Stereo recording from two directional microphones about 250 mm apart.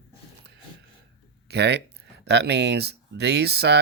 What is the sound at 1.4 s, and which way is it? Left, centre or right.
Speech, right.